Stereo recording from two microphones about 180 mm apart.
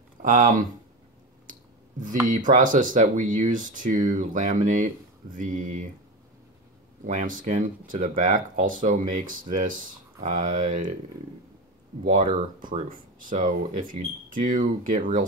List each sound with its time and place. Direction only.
0.2 s speech: 45° right (ahead or behind)
1.5 s a sound: 45° right (ahead or behind)
2.2 s speech: 45° right (ahead or behind)
7.1 s speech: 45° right (ahead or behind)
12.0 s speech: 45° right (ahead or behind)